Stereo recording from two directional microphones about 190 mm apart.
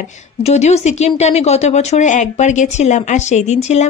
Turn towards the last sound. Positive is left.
turn(degrees=35)  # may be behind; listen again after turning